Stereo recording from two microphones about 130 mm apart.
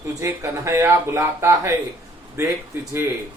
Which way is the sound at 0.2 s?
20° right (ahead or behind).